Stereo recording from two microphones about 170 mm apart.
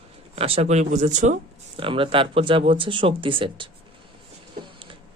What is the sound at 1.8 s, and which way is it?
Speech, 30° right (ahead or behind).